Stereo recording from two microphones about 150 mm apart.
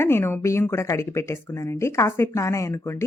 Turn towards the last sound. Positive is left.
turn(degrees=15)  # may be behind; listen again after turning